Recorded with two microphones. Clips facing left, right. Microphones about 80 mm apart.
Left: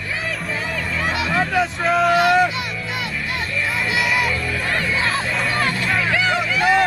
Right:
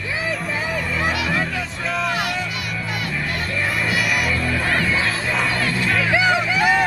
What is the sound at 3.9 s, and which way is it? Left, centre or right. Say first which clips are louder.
Music: left 4 dB; left.